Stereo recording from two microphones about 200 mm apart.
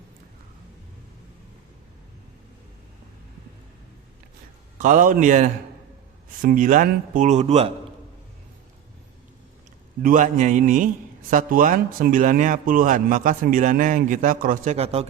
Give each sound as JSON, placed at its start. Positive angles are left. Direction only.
{"t": 4.8, "sound": "a man's voice", "side_deg": -40}
{"t": 10.0, "sound": "a man's voice", "side_deg": -40}